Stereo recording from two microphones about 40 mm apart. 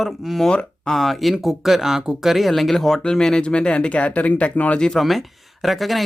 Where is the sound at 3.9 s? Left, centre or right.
Left.